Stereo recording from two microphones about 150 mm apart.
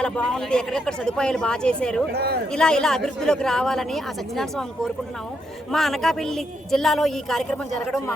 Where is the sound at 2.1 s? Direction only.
90° right.